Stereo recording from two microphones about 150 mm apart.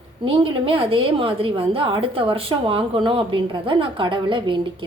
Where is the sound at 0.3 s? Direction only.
35° right (ahead or behind).